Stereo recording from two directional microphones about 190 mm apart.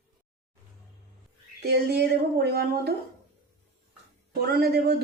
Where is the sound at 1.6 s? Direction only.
60° right (ahead or behind).